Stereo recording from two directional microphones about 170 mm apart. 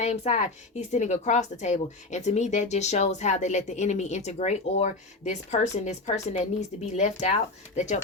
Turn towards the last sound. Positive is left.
turn(degrees=40)  # may be behind; listen again after turning